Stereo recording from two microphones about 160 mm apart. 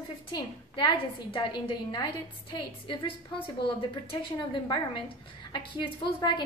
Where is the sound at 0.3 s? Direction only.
30° left (ahead or behind).